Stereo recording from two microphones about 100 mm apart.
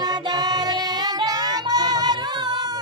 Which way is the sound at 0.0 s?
45° right (ahead or behind).